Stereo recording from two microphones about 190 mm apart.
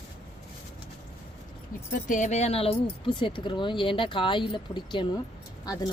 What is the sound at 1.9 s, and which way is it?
Speech, 40° left (ahead or behind).